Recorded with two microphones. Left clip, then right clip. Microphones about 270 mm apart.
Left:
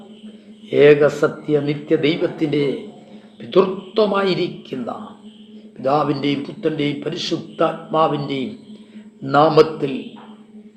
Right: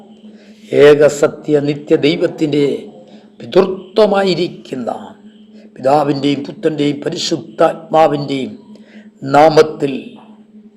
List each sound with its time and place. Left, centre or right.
0.7 s a man's voice: right